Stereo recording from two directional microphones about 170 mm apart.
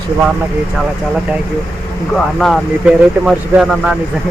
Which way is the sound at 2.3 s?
Centre (ahead or behind).